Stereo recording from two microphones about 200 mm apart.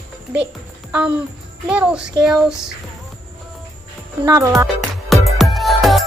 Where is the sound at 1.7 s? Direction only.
5° right (ahead or behind).